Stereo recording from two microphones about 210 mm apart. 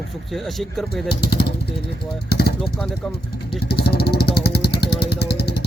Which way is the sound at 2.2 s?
50° left (ahead or behind).